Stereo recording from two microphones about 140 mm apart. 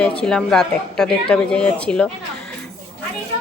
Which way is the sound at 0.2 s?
5° left (ahead or behind).